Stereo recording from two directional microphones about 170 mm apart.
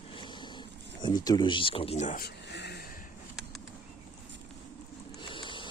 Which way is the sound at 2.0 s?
65° left (ahead or behind).